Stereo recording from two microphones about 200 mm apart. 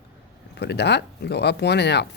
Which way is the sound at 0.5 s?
55° left (ahead or behind).